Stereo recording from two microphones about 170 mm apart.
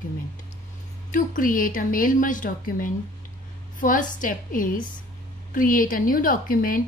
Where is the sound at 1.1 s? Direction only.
55° left (ahead or behind).